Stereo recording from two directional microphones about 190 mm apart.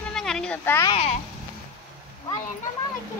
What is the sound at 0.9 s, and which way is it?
Speech, 35° left (ahead or behind).